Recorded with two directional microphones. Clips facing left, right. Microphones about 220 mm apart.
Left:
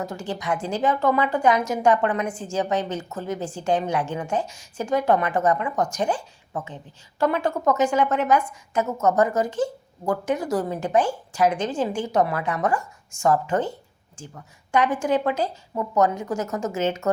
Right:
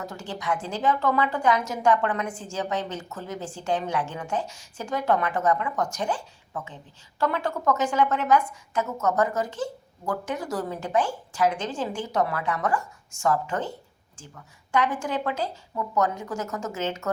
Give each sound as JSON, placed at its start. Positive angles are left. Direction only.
{"t": 0.0, "sound": "a woman's voice", "side_deg": 15}
{"t": 7.2, "sound": "a woman's voice", "side_deg": 15}
{"t": 14.7, "sound": "a woman's voice", "side_deg": 15}